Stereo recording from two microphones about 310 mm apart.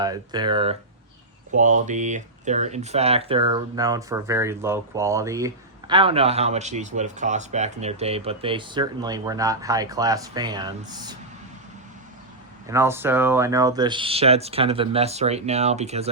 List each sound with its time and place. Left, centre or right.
0.0 s speech: centre
12.7 s speech: centre